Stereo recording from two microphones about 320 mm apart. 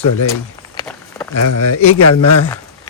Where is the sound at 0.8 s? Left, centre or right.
Centre.